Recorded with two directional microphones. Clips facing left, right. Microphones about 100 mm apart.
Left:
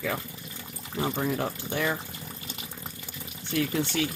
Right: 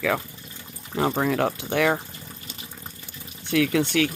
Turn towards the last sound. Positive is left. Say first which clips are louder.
# right 6 dB
turn(degrees=-80)